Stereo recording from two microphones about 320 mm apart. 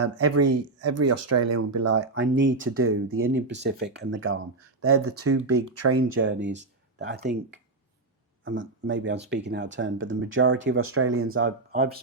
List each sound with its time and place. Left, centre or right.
0.0 s speech: right
6.1 s speech: right
8.4 s speech: right
11.7 s speech: right